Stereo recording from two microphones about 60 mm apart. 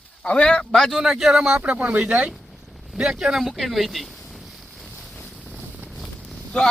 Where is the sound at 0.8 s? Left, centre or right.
Centre.